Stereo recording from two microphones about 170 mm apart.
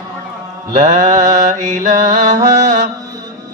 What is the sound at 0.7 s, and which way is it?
Mantra, 45° right (ahead or behind).